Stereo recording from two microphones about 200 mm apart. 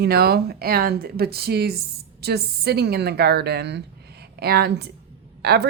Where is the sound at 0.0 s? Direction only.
50° right (ahead or behind).